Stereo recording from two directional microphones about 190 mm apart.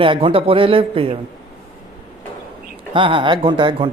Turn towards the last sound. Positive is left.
turn(degrees=-25)  # may be behind; listen again after turning